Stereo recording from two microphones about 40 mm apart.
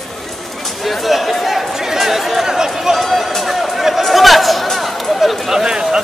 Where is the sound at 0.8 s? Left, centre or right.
Centre.